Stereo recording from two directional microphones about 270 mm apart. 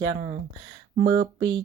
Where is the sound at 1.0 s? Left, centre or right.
Right.